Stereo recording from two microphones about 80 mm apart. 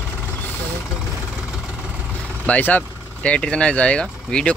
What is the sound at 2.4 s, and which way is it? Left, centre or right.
Speech, centre.